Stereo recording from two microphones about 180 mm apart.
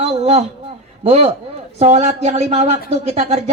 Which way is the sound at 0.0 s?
35° right (ahead or behind).